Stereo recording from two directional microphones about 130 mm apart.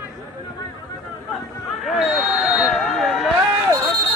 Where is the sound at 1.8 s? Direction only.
Centre (ahead or behind).